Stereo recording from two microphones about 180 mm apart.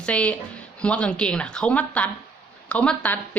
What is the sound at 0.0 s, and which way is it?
Speech, 5° left (ahead or behind).